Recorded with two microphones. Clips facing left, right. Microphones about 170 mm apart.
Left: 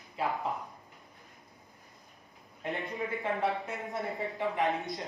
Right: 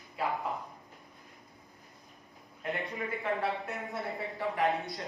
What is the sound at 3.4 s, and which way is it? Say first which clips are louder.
Speech: left 2 dB; centre (ahead or behind).